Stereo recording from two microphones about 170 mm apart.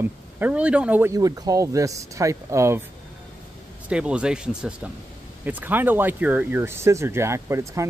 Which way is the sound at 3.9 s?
5° right (ahead or behind).